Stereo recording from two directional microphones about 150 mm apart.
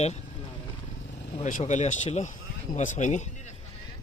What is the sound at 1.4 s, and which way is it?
Speech, 50° left (ahead or behind).